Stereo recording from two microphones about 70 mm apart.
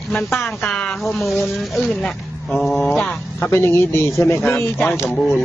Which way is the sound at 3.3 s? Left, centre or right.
Left.